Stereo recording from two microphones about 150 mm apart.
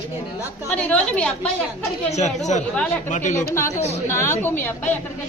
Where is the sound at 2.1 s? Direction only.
50° left (ahead or behind).